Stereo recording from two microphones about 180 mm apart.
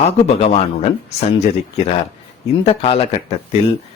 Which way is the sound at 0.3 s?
35° left (ahead or behind).